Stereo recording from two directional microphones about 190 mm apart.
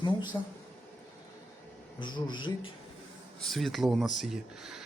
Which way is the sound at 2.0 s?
25° left (ahead or behind).